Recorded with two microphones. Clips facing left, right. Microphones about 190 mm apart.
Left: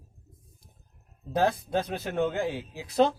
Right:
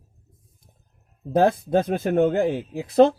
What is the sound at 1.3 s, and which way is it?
Speech, 50° right (ahead or behind).